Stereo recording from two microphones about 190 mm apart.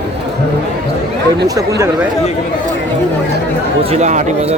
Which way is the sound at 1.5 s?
15° right (ahead or behind).